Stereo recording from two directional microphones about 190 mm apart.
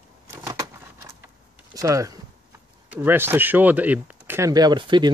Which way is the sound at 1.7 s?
15° right (ahead or behind).